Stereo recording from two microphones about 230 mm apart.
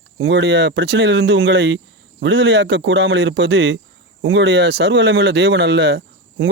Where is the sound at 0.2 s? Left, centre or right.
Right.